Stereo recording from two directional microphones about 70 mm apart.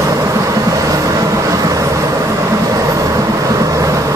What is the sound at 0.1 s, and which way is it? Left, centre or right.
Vehicle, right.